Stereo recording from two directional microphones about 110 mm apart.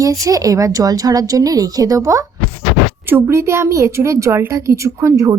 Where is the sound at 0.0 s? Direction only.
30° right (ahead or behind).